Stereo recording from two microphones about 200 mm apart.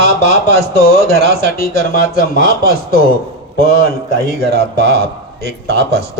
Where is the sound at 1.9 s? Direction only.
45° left (ahead or behind).